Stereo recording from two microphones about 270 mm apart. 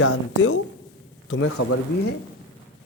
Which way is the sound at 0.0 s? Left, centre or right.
Left.